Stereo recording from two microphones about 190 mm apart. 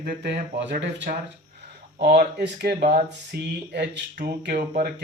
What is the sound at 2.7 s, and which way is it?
Speech, 35° right (ahead or behind).